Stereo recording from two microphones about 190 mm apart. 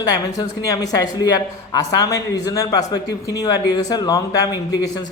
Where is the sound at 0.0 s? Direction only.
20° left (ahead or behind).